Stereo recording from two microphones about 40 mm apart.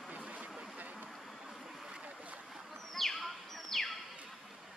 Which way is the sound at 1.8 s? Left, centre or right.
Right.